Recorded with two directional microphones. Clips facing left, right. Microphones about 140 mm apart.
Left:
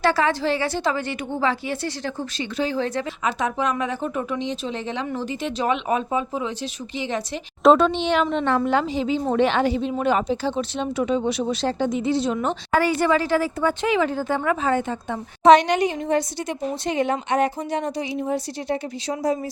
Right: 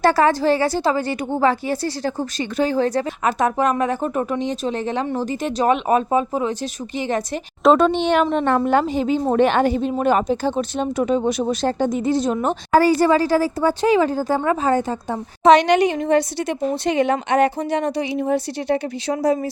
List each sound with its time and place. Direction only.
0.0 s a woman's voice: 40° right (ahead or behind)
15.6 s a woman's voice: 75° right (ahead or behind)